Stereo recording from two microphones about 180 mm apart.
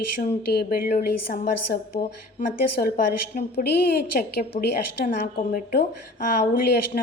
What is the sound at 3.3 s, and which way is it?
Speech, 55° left (ahead or behind).